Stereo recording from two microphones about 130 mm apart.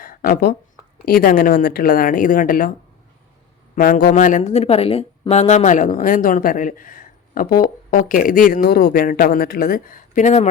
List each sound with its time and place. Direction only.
0.0 s a sound: 90° left
1.2 s speech: 90° left
3.8 s speech: 90° left; by 10.5 s 70° left (ahead or behind)